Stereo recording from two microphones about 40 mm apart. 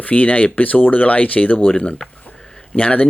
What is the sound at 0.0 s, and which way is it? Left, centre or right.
Speech, left.